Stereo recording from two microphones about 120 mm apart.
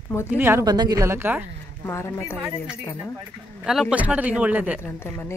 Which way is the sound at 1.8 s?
20° left (ahead or behind).